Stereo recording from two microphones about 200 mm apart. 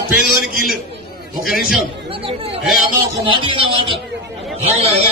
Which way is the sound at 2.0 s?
30° right (ahead or behind).